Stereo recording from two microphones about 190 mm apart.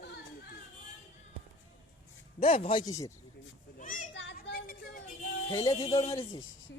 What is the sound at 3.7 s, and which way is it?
Children playing, 45° left (ahead or behind).